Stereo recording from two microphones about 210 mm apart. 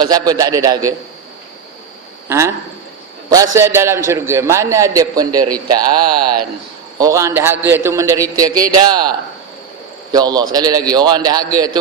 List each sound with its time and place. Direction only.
0.0 s a man's voice: 20° right (ahead or behind)
3.2 s a man's voice: 15° right (ahead or behind)
7.0 s a man's voice: 15° right (ahead or behind)